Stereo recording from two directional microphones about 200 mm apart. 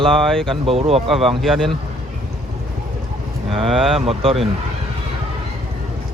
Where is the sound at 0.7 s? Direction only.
30° right (ahead or behind).